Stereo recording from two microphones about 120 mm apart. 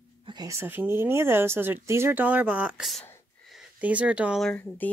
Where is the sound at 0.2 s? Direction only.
40° right (ahead or behind).